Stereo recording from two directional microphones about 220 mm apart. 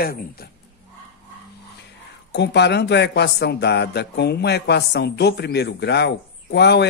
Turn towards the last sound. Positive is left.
turn(degrees=50)  # may be behind; listen again after turning